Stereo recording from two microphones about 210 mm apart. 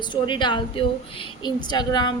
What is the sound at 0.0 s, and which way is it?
A woman's voice, 20° left (ahead or behind).